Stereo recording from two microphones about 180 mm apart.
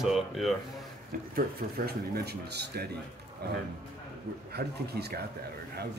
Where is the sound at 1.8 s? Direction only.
60° right (ahead or behind).